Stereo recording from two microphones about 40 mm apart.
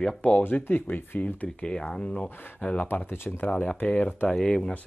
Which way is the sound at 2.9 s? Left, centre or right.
Left.